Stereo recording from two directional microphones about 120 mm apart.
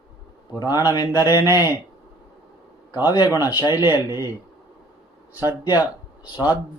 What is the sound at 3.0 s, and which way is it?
Speech, 35° left (ahead or behind).